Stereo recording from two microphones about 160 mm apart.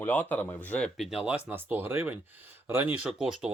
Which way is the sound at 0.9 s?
5° right (ahead or behind).